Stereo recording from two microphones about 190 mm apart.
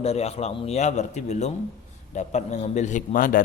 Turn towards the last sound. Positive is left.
turn(degrees=45)  # may be behind; listen again after turning